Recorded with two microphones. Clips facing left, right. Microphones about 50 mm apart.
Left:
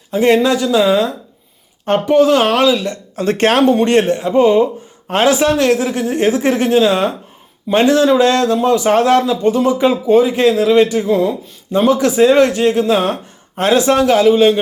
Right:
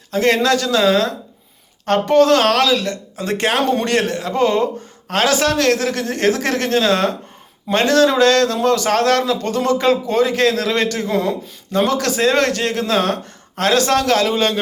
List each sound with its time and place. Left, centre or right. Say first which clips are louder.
0.1 s a man's voice: left 3 dB; centre
3.2 s speech: left 6 dB; left
3.6 s speech: left 6 dB; centre
3.8 s speech: left 5 dB; left; by 14.6 s centre